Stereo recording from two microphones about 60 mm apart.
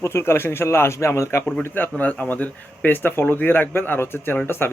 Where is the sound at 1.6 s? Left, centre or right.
Left.